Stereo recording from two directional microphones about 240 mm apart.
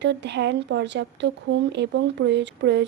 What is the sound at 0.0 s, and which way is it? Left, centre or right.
Speech, right.